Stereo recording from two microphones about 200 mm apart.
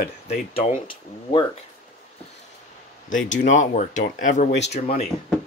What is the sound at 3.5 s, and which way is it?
Speech, 40° left (ahead or behind).